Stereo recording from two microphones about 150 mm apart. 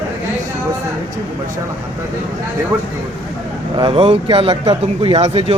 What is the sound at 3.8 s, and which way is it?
Speech, 35° right (ahead or behind).